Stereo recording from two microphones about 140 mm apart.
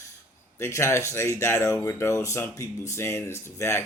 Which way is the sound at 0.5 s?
20° left (ahead or behind).